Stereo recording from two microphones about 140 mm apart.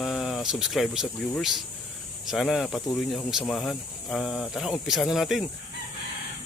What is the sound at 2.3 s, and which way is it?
Speech, centre (ahead or behind).